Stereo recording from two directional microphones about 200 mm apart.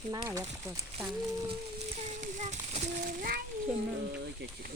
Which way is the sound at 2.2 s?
35° right (ahead or behind).